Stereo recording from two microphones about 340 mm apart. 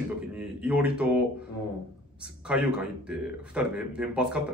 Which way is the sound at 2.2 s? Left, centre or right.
Centre.